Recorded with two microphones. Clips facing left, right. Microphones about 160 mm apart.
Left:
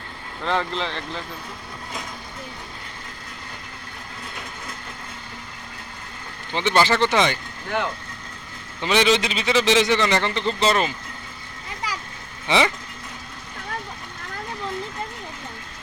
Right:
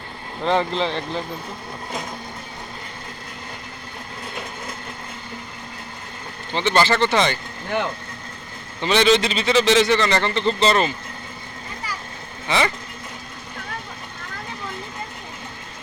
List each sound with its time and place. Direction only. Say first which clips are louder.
0.4 s speech: right 4 dB; 20° right (ahead or behind)
6.5 s speech: right 1 dB; 10° left (ahead or behind)
8.8 s speech: right 2 dB; 10° left (ahead or behind)
12.5 s speech: left 1 dB; 15° left (ahead or behind)